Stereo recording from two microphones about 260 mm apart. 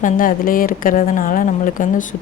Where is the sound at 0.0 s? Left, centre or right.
Left.